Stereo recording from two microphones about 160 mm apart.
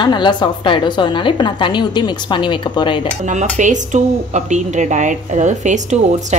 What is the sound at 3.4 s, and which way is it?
Speech, 50° right (ahead or behind).